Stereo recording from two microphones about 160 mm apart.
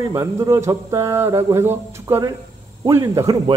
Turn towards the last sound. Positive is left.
turn(degrees=-20)  # may be behind; listen again after turning